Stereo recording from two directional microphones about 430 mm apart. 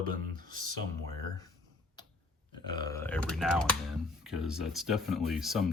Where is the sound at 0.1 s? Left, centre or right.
Centre.